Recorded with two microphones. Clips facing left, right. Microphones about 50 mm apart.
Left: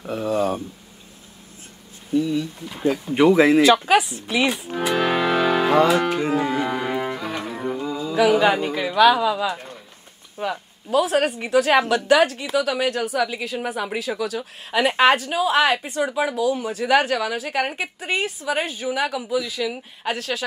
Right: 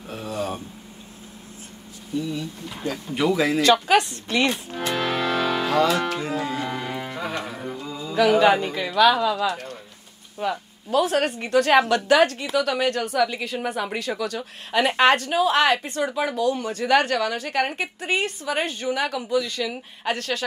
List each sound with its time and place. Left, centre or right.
0.0 s a sound: left
2.1 s a sound: left
2.8 s speech: left
3.6 s speech: centre; by 6.7 s left
6.7 s music: centre
7.2 s music: centre
7.5 s music: centre
8.1 s a woman's voice: centre